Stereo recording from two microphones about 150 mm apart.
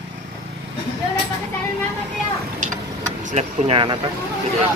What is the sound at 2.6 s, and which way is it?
Vehicle, 55° right (ahead or behind).